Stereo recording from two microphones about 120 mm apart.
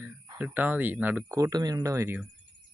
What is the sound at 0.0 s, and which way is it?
Speech, 15° right (ahead or behind).